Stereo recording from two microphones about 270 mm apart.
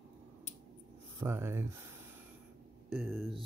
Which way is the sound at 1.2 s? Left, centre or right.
Centre.